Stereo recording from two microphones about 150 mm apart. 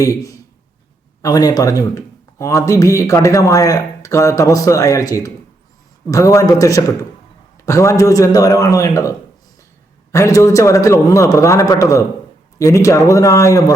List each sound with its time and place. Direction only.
0.0 s speech: 20° left (ahead or behind)